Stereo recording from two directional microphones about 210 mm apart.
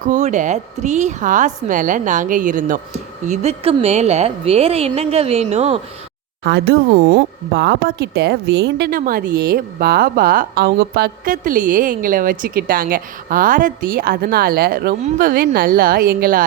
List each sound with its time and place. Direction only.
0.1 s a woman's voice: 35° right (ahead or behind)
6.4 s speech: 55° right (ahead or behind)